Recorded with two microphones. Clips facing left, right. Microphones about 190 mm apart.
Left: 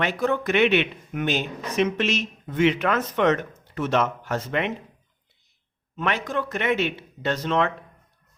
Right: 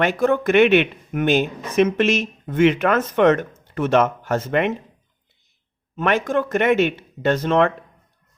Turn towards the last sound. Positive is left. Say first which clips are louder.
# right 6 dB
turn(degrees=-50)  # may be behind; listen again after turning